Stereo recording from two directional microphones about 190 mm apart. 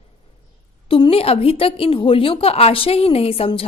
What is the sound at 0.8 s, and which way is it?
A woman's voice, 30° left (ahead or behind).